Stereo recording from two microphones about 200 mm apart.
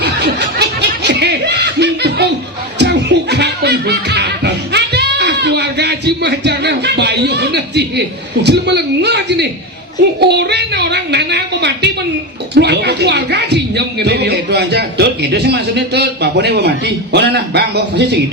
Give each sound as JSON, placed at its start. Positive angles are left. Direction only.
{"t": 0.0, "sound": "snicker", "side_deg": -55}
{"t": 2.7, "sound": "music", "side_deg": -60}
{"t": 8.4, "sound": "speech", "side_deg": -55}